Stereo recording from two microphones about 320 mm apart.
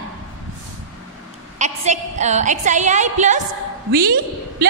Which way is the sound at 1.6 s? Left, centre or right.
Right.